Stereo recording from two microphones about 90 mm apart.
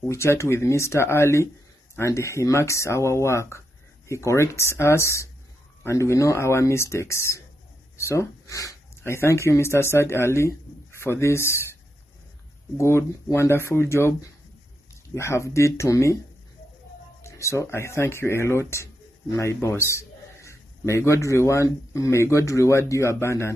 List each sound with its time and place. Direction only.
0.1 s speech: 30° left (ahead or behind)
17.2 s a man's voice: 35° left (ahead or behind)